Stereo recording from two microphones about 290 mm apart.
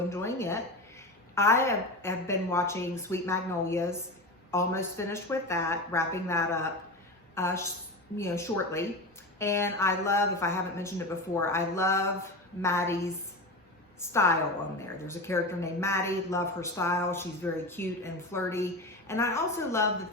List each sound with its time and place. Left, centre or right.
0.1 s a sound: centre
1.4 s speech: centre
14.0 s speech: centre